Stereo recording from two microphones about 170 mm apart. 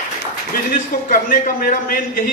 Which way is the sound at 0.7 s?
55° left (ahead or behind).